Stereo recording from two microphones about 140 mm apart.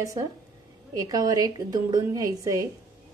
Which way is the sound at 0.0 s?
25° right (ahead or behind).